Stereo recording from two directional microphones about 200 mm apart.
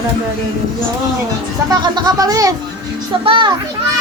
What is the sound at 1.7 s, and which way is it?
Speech, 20° right (ahead or behind).